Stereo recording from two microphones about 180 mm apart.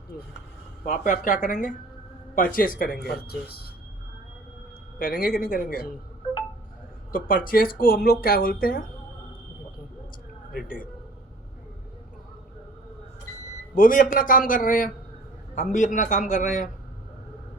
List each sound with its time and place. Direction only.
0.9 s speech: 45° left (ahead or behind)
4.9 s speech: 55° left (ahead or behind)
7.1 s speech: 50° left (ahead or behind)
10.5 s speech: 55° left (ahead or behind)
13.7 s speech: 50° left (ahead or behind)